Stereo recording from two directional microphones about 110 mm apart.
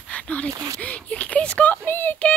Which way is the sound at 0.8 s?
10° left (ahead or behind).